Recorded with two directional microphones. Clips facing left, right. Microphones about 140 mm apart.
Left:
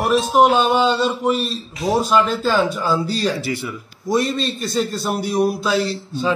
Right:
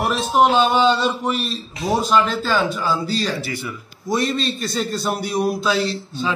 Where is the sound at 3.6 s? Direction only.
5° left (ahead or behind).